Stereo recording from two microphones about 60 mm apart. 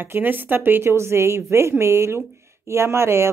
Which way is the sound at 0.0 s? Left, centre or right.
Right.